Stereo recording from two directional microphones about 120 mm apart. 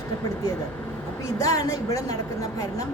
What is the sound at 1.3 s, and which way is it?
Speech, 30° left (ahead or behind).